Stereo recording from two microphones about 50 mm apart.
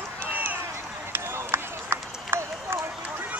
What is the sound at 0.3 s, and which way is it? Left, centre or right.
Run, right.